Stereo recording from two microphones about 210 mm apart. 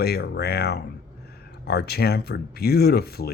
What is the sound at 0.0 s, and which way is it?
Speech, 50° left (ahead or behind).